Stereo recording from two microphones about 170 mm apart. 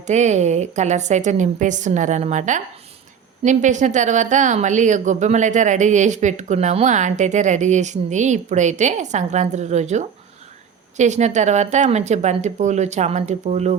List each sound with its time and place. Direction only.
0.1 s a woman's voice: 45° right (ahead or behind)